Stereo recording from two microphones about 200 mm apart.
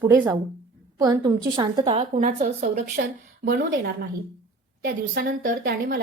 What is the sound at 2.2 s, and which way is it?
A woman's voice, 35° right (ahead or behind).